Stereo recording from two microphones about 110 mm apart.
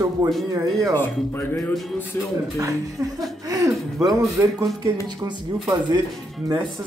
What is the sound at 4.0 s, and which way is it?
Speech, 30° right (ahead or behind).